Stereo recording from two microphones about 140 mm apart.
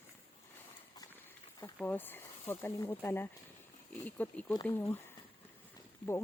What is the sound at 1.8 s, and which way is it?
Speech, 15° left (ahead or behind).